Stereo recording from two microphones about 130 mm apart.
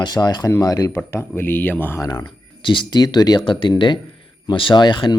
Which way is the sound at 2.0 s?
30° left (ahead or behind).